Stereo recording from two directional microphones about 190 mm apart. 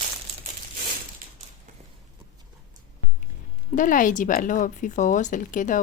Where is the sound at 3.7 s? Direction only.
45° left (ahead or behind).